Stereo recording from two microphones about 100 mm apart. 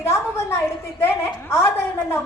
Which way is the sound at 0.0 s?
25° left (ahead or behind).